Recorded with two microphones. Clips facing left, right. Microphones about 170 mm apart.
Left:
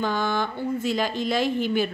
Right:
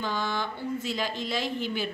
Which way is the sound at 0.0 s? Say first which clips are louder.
Left 5 dB; 55° left (ahead or behind).